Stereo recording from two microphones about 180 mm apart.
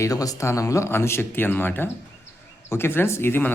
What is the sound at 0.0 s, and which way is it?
Speech, 20° left (ahead or behind).